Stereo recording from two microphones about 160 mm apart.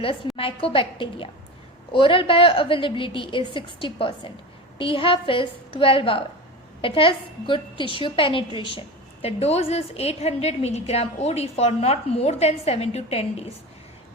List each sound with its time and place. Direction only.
0.3 s a woman's voice: 35° left (ahead or behind)